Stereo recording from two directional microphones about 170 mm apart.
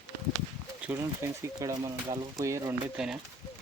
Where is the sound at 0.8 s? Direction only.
10° right (ahead or behind).